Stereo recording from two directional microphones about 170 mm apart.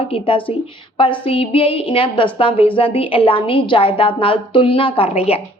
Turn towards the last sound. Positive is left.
turn(degrees=35)  # may be behind; listen again after turning